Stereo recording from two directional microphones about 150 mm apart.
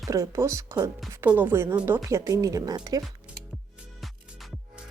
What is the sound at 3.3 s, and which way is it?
Music, 10° right (ahead or behind).